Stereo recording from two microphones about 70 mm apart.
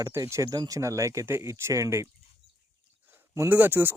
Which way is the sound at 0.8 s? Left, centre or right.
Right.